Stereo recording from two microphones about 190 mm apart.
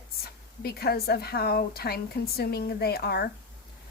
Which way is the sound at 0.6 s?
55° left (ahead or behind).